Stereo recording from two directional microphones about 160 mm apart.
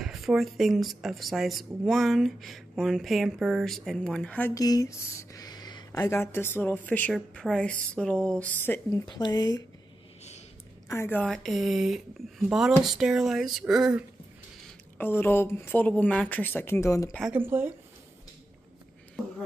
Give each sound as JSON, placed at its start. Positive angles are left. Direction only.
{"t": 0.0, "sound": "speech", "side_deg": 0}
{"t": 9.0, "sound": "speech", "side_deg": 25}
{"t": 10.9, "sound": "speech", "side_deg": 15}
{"t": 15.0, "sound": "speech", "side_deg": 15}
{"t": 17.2, "sound": "speech", "side_deg": -10}